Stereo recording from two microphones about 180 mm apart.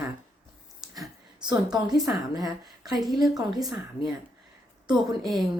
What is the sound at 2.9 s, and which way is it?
Speech, centre (ahead or behind).